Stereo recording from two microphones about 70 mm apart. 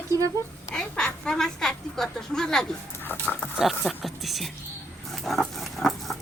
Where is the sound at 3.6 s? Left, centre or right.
Centre.